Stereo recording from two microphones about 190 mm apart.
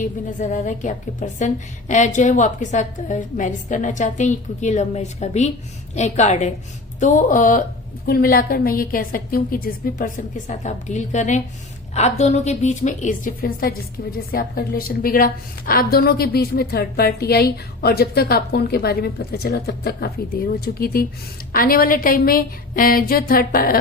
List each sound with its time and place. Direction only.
0.0 s a woman's voice: 40° left (ahead or behind)